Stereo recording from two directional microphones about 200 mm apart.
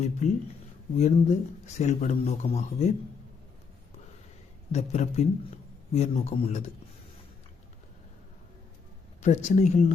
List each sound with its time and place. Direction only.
0.2 s speech: 35° left (ahead or behind)
4.7 s speech: 35° left (ahead or behind)
9.2 s speech: 35° left (ahead or behind)